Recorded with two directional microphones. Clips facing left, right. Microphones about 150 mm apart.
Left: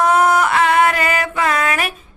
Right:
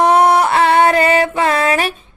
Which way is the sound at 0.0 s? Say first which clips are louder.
Right 3 dB; 35° right (ahead or behind).